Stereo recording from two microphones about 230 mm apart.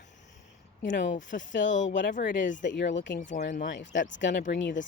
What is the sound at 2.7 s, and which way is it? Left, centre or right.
Speech, left.